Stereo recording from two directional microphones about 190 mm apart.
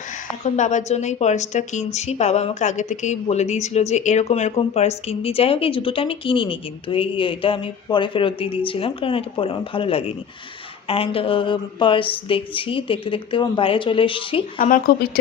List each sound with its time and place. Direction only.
0.1 s a woman's voice: 40° left (ahead or behind)
14.6 s speech: 50° left (ahead or behind)